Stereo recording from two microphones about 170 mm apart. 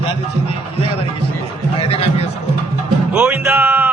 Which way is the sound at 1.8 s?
35° left (ahead or behind).